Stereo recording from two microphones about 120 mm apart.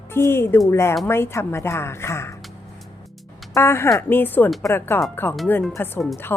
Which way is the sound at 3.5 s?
20° left (ahead or behind).